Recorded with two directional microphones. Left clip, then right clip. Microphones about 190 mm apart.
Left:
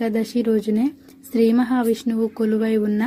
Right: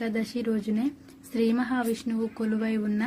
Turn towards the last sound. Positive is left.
turn(degrees=25)  # may be behind; listen again after turning